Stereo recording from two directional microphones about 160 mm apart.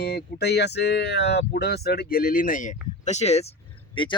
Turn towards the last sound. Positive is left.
turn(degrees=30)  # may be behind; listen again after turning